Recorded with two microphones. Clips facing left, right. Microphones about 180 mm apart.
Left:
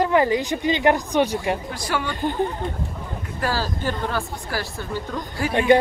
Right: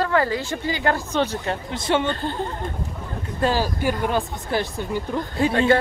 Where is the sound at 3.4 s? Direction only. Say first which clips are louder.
Right 4 dB; 15° right (ahead or behind).